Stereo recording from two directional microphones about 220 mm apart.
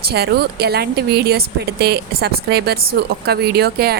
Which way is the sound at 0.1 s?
45° right (ahead or behind).